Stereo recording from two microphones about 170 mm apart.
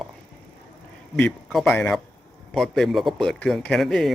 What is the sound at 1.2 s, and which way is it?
Speech, 5° left (ahead or behind).